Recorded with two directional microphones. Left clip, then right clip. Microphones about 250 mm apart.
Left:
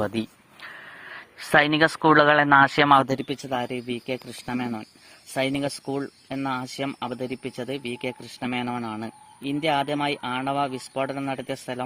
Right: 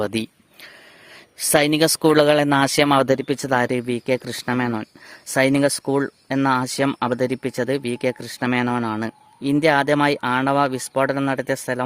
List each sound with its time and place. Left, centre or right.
0.0 s speech: right
1.5 s speech: right
3.1 s speech: right